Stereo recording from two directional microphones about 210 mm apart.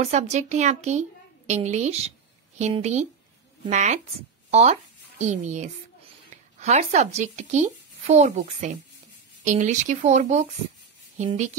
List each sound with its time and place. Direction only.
0.0 s speech: 35° right (ahead or behind)